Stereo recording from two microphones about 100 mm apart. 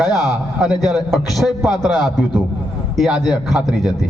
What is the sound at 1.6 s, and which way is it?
Speech, 45° left (ahead or behind).